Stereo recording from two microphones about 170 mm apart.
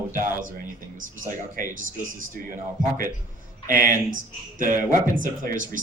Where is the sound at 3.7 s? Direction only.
55° right (ahead or behind).